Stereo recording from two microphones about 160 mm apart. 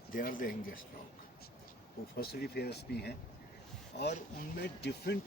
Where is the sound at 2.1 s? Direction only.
75° left (ahead or behind); by 5.2 s 90° left.